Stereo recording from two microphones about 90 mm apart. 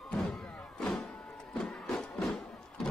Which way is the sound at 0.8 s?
10° left (ahead or behind).